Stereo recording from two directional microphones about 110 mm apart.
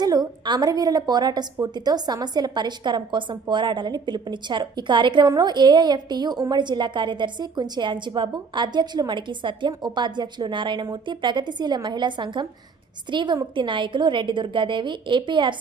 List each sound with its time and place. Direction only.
0.0 s a woman's voice: 40° right (ahead or behind)